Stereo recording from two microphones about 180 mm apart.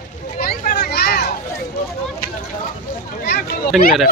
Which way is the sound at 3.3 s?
60° left (ahead or behind).